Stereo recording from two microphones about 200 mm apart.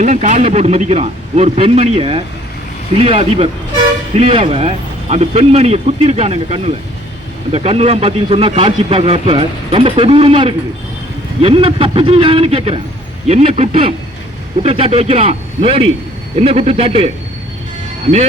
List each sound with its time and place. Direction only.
0.0 s a man's voice: 35° right (ahead or behind)